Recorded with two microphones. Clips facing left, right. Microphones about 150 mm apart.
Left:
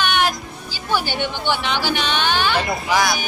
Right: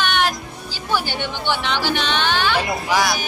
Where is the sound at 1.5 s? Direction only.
5° left (ahead or behind).